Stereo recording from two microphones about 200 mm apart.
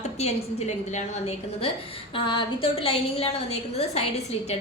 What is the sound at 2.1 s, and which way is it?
A woman's voice, 25° left (ahead or behind).